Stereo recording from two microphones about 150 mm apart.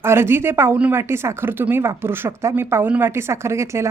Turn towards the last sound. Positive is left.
turn(degrees=-20)  # may be behind; listen again after turning